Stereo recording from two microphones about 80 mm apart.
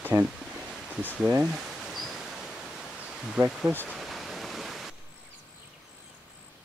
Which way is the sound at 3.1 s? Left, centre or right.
Centre.